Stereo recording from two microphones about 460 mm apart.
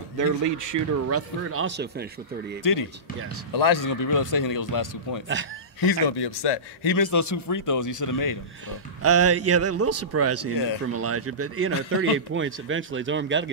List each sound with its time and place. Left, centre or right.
0.2 s a man's voice: right
2.6 s a man's voice: left
5.8 s a man's voice: left
8.6 s a man's voice: right